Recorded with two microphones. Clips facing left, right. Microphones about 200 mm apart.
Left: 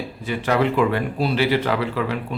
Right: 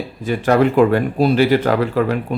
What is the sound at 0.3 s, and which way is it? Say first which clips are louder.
Speech: right 6 dB; 45° right (ahead or behind).